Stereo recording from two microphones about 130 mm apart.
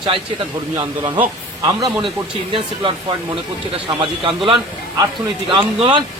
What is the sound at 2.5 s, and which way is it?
Speech, 40° right (ahead or behind).